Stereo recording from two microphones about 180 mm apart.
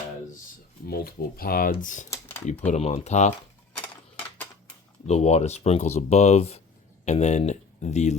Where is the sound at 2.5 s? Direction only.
40° left (ahead or behind).